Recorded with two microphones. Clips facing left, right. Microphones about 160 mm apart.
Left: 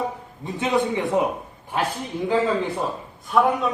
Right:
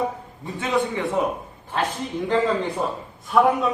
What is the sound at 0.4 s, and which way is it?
Speech, 20° left (ahead or behind).